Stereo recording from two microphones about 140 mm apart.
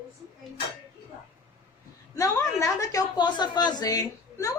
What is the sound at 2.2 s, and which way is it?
A woman's voice, 25° left (ahead or behind).